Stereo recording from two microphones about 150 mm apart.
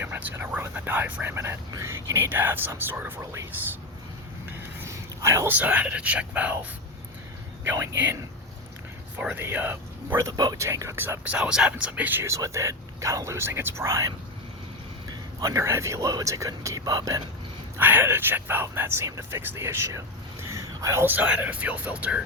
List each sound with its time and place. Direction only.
0.0 s speech: 10° right (ahead or behind)
4.9 s speech: 20° right (ahead or behind)
7.6 s speech: 15° right (ahead or behind)
15.4 s speech: 20° right (ahead or behind)
17.7 s speech: 15° right (ahead or behind)